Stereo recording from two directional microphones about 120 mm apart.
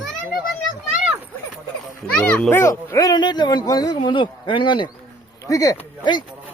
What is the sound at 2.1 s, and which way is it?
Speech, 15° left (ahead or behind).